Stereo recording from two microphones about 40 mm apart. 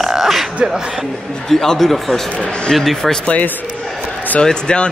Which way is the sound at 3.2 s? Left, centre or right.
Left.